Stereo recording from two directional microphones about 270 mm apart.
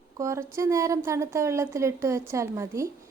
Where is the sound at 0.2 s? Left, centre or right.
Centre.